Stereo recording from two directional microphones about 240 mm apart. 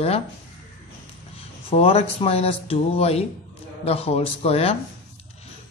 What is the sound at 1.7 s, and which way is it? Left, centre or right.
Speech, left.